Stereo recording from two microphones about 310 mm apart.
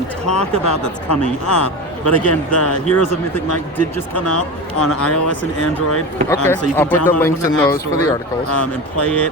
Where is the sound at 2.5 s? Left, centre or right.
Left.